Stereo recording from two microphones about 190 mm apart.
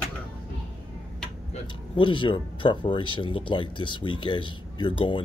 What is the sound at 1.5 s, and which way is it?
Speech, 25° left (ahead or behind).